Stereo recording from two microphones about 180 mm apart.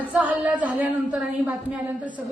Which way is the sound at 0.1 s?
10° right (ahead or behind).